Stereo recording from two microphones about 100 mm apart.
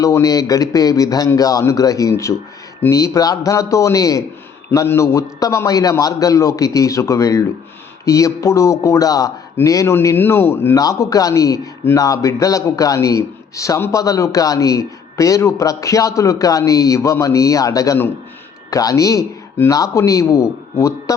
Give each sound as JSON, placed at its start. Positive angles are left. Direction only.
{"t": 0.0, "sound": "a man's voice", "side_deg": 35}
{"t": 10.8, "sound": "a man's voice", "side_deg": 35}